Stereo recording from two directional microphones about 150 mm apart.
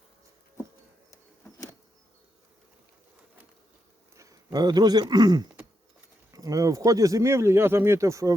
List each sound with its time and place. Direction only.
1.1 s insect: 20° left (ahead or behind)
4.1 s a sound: 20° right (ahead or behind)
4.5 s speech: 25° right (ahead or behind)